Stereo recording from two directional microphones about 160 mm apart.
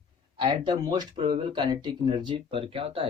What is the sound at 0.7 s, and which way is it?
Speech, 25° right (ahead or behind).